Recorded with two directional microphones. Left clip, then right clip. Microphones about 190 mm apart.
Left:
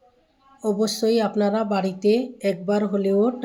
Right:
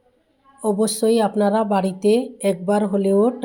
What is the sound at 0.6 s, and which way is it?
A woman's voice, 15° right (ahead or behind).